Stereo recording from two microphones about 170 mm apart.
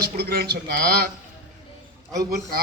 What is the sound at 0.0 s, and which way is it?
Speech, 70° right (ahead or behind).